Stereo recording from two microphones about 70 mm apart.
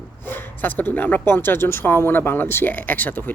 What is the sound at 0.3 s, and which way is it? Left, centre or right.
Speech, left.